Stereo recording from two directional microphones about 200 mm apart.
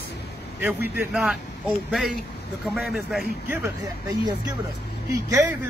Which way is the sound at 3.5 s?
15° right (ahead or behind).